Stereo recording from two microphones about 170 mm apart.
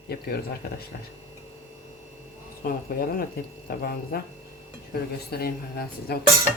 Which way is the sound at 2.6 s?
60° left (ahead or behind).